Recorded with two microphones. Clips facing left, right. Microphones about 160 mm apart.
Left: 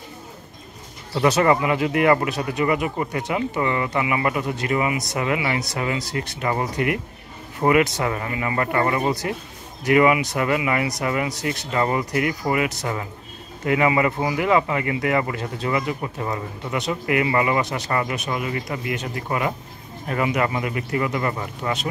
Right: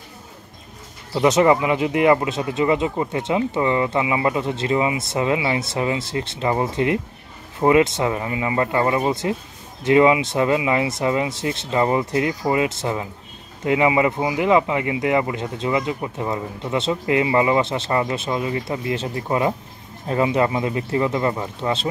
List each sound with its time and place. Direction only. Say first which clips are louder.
1.1 s speech: right 2 dB; 20° right (ahead or behind)